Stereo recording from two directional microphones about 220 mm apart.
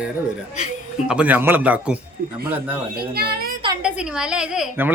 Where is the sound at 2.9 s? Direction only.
45° right (ahead or behind).